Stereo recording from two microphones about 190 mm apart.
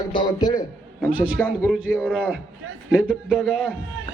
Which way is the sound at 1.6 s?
5° right (ahead or behind).